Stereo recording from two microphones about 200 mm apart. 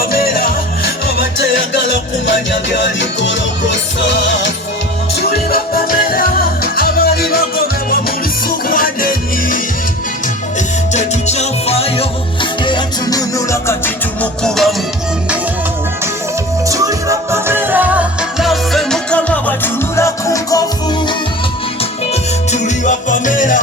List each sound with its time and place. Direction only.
0.0 s music: 45° left (ahead or behind); by 4.5 s 65° left (ahead or behind)
5.3 s music: 50° left (ahead or behind)
8.4 s music: 45° left (ahead or behind)
10.9 s music: 35° left (ahead or behind); by 14.8 s centre (ahead or behind)
16.6 s music: 15° right (ahead or behind); by 20.7 s 15° left (ahead or behind)
22.1 s music: 35° left (ahead or behind)